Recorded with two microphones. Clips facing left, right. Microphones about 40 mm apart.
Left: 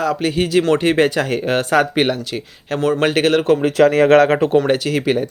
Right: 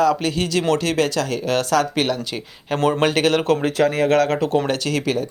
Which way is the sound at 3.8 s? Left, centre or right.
Left.